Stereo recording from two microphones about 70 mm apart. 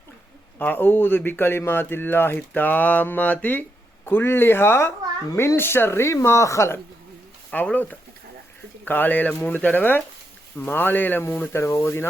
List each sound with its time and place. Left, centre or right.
0.6 s speech: left
5.3 s a child's voice: left
5.5 s speech: left
7.5 s speech: left
11.5 s speech: left